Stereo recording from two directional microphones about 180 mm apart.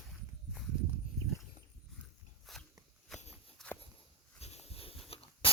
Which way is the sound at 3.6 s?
5° left (ahead or behind).